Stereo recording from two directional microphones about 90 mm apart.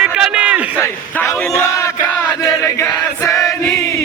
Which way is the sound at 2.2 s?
35° left (ahead or behind).